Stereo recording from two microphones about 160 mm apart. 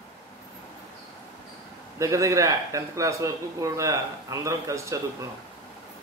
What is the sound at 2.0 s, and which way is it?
A man's voice, 20° right (ahead or behind).